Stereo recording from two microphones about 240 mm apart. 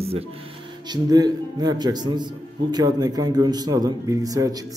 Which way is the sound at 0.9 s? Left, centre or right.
Centre.